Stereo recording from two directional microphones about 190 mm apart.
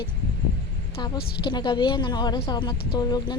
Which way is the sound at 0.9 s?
25° left (ahead or behind).